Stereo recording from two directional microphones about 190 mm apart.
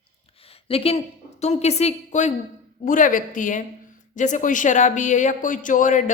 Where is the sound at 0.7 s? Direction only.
30° left (ahead or behind).